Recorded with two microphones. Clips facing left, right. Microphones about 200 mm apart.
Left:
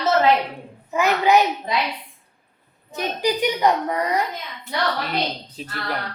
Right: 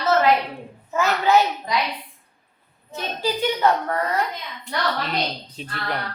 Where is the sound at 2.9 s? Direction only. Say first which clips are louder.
Left 3 dB; 15° left (ahead or behind).